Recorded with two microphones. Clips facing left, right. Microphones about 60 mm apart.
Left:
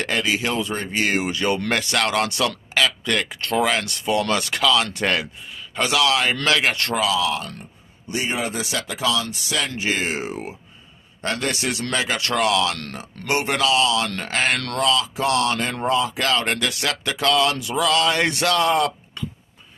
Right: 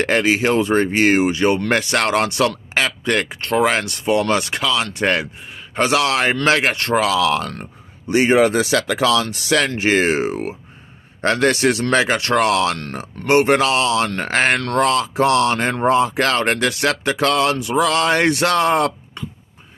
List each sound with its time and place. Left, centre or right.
0.0 s speech: right
1.2 s speech: right
5.0 s speech: right
5.8 s speech: right
7.0 s speech: right
11.1 s a sound: right
12.9 s speech: right
14.8 s a sound: right
16.5 s speech: right